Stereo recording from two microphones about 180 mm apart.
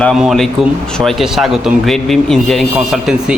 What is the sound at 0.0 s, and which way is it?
Speech, centre (ahead or behind).